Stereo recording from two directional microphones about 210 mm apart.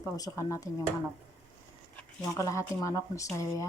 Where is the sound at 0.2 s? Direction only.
15° left (ahead or behind).